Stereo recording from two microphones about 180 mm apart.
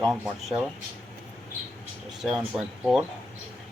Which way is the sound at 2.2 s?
Centre (ahead or behind).